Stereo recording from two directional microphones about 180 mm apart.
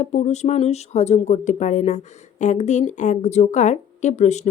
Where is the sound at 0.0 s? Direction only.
40° left (ahead or behind).